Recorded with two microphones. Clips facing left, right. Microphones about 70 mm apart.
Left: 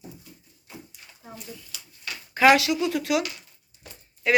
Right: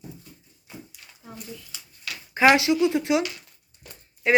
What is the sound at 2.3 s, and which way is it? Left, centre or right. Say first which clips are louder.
A woman's voice: even; right.